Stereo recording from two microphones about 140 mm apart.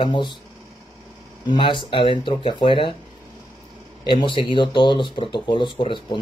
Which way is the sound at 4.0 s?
30° left (ahead or behind).